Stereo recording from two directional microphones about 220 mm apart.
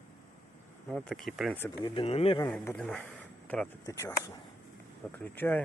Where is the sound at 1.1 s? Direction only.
Centre (ahead or behind).